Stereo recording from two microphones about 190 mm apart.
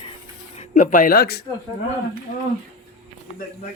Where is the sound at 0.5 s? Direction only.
40° left (ahead or behind).